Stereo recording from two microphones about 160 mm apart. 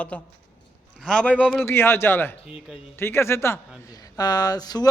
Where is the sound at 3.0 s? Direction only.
15° left (ahead or behind).